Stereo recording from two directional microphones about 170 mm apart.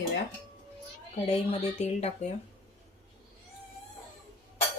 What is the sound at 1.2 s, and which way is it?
Speech, 40° left (ahead or behind).